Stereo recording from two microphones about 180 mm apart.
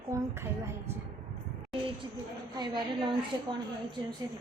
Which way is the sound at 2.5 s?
25° right (ahead or behind).